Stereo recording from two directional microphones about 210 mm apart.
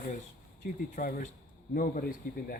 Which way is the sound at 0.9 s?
40° left (ahead or behind).